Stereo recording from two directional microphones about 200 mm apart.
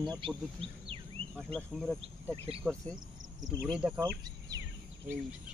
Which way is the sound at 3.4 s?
20° right (ahead or behind).